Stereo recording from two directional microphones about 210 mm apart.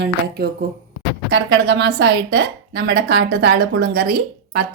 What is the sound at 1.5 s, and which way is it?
A woman's voice, 60° right (ahead or behind).